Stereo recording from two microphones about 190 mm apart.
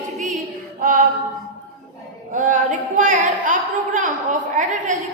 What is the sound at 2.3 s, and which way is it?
A woman's voice, 45° right (ahead or behind).